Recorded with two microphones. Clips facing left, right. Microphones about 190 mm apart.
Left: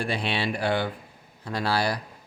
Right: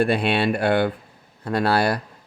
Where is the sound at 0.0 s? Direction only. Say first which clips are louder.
Right 8 dB; 55° right (ahead or behind).